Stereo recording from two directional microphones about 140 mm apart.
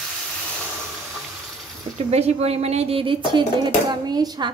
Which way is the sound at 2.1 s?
50° right (ahead or behind).